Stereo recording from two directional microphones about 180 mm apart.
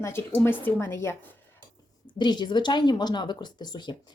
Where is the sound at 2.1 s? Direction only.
25° left (ahead or behind).